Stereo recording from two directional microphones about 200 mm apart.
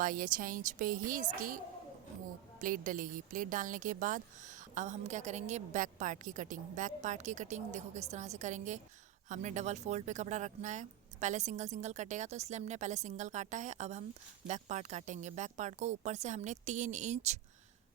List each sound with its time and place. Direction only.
0.0 s speech: 45° right (ahead or behind)
2.6 s a woman's voice: 40° right (ahead or behind)